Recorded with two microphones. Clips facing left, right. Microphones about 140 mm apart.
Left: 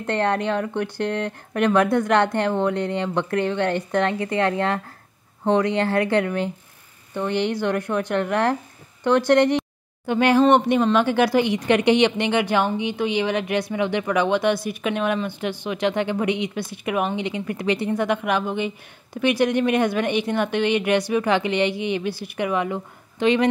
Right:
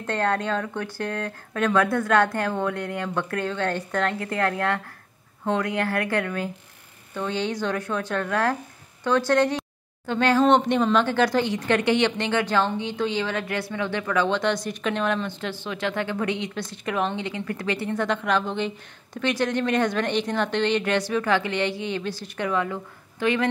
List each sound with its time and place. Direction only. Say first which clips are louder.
0.0 s a woman's voice: left 3 dB; 15° left (ahead or behind)